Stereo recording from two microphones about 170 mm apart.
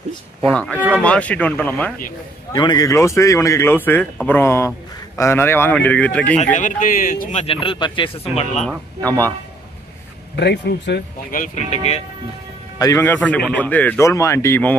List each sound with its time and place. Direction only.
0.5 s speech: 5° left (ahead or behind)
2.5 s speech: 25° left (ahead or behind); by 6.4 s 10° left (ahead or behind)
6.4 s a man's voice: 50° left (ahead or behind)
7.6 s speech: 30° left (ahead or behind)
8.6 s speech: 10° left (ahead or behind)
10.3 s speech: 90° left
11.3 s speech: 45° left (ahead or behind)
12.7 s a man's voice: 20° left (ahead or behind)